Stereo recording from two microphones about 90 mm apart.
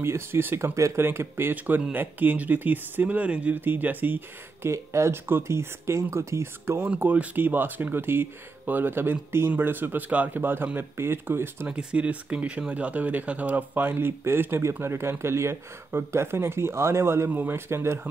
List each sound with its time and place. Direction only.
0.0 s speech: 25° right (ahead or behind)
4.6 s speech: 30° right (ahead or behind)
11.6 s speech: 10° right (ahead or behind); by 18.0 s 30° right (ahead or behind)